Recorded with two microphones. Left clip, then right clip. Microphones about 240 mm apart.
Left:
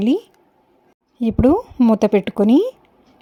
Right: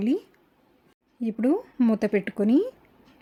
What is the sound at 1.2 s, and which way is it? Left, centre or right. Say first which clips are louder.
A woman's voice: left 9 dB; left.